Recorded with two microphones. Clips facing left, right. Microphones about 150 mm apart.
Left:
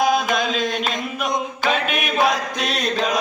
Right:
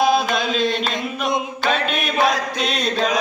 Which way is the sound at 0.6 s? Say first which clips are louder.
Right 2 dB; 15° left (ahead or behind).